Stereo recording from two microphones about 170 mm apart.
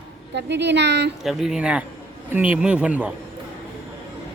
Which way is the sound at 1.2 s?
5° right (ahead or behind).